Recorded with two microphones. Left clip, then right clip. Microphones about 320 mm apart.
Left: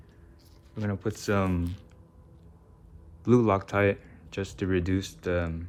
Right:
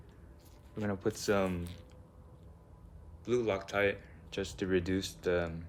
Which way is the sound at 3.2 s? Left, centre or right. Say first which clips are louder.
Left 9 dB; centre.